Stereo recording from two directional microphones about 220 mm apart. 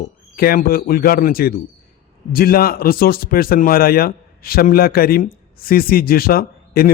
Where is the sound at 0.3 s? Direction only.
40° left (ahead or behind).